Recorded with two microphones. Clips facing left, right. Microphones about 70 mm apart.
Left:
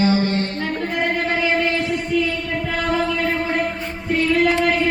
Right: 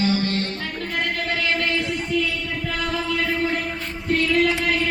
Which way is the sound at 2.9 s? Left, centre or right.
Left.